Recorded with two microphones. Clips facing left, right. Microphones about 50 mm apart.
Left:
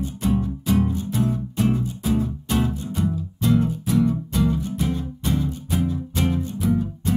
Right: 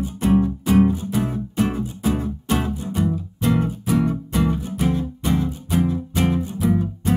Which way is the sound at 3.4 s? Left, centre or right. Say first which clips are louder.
Even; right.